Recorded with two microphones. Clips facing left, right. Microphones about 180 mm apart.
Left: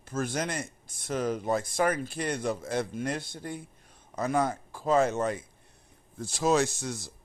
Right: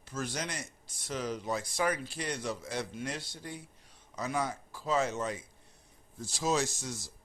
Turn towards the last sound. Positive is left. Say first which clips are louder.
# left 5 dB
turn(degrees=60)  # may be behind; listen again after turning